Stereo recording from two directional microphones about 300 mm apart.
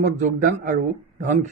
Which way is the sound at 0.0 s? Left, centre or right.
Right.